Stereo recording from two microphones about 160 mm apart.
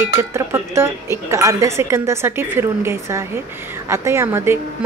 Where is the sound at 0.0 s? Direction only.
15° right (ahead or behind).